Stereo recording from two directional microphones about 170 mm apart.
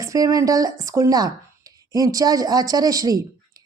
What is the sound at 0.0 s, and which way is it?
A woman's voice, 20° right (ahead or behind).